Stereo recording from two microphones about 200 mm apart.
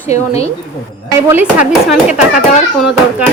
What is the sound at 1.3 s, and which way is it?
Speech, 10° right (ahead or behind).